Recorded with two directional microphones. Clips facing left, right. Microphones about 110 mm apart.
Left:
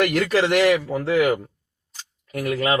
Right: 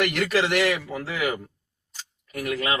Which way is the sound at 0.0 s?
40° left (ahead or behind).